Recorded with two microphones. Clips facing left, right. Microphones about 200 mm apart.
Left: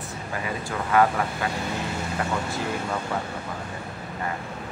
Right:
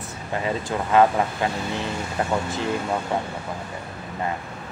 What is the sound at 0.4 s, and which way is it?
Speech, 25° right (ahead or behind).